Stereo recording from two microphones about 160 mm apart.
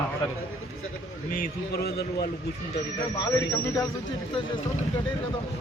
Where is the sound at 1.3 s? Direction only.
65° left (ahead or behind).